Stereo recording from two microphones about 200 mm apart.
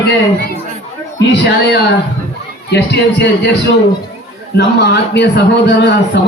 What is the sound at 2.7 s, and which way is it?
Speech, 55° left (ahead or behind).